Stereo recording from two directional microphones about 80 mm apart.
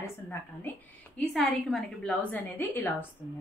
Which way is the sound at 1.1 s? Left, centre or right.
Centre.